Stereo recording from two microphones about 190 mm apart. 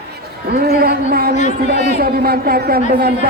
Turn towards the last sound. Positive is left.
turn(degrees=-55)  # may be behind; listen again after turning